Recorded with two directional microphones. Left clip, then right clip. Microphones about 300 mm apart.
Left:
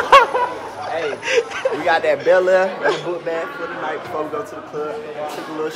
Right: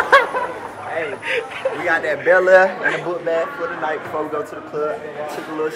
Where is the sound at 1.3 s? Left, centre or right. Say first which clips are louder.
Left 5 dB; left.